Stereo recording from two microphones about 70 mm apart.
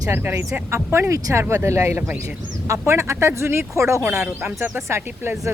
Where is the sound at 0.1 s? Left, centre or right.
Right.